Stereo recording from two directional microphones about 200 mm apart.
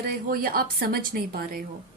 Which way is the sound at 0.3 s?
50° right (ahead or behind).